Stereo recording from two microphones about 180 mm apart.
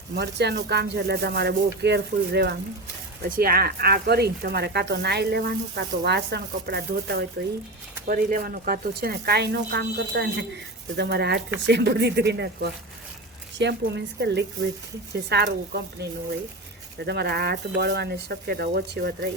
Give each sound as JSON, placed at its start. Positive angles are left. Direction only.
{"t": 0.2, "sound": "speech", "side_deg": -70}
{"t": 3.2, "sound": "speech", "side_deg": -55}
{"t": 8.0, "sound": "speech", "side_deg": -50}
{"t": 17.1, "sound": "speech", "side_deg": -65}